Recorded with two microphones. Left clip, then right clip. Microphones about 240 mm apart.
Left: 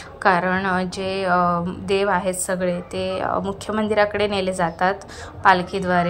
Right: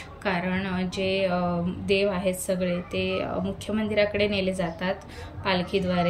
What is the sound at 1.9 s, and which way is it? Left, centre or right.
Speech, left.